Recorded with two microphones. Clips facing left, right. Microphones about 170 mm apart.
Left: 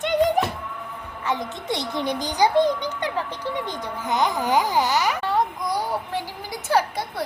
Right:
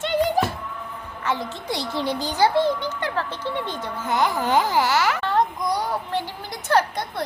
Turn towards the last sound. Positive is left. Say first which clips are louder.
# right 1 dB
turn(degrees=10)  # may be behind; listen again after turning